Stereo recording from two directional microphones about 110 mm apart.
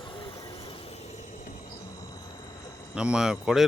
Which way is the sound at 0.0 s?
50° left (ahead or behind).